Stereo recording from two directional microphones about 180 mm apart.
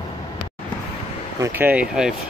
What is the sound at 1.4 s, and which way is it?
Speech, 10° right (ahead or behind).